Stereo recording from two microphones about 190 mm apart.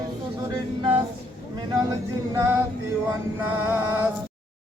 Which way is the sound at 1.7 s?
20° right (ahead or behind).